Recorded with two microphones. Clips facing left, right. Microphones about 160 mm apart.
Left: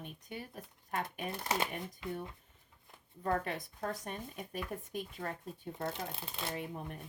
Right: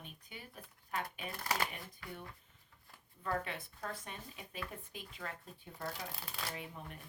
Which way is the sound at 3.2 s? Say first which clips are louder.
Left 4 dB; 45° left (ahead or behind).